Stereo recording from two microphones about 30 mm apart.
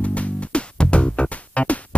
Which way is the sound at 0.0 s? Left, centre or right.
Left.